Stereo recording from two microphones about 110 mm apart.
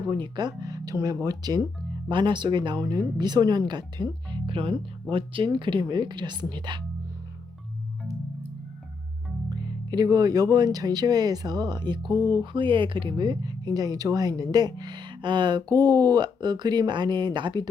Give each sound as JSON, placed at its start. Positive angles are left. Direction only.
{"t": 0.1, "sound": "speech", "side_deg": -40}
{"t": 9.5, "sound": "speech", "side_deg": -40}